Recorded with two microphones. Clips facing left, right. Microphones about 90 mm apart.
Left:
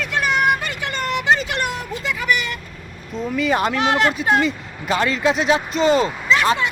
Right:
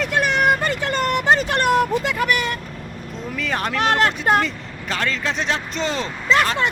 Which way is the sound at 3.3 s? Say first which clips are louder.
Left 4 dB; 5° left (ahead or behind).